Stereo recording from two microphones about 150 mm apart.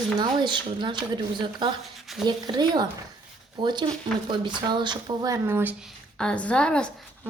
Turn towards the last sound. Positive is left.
turn(degrees=5)  # may be behind; listen again after turning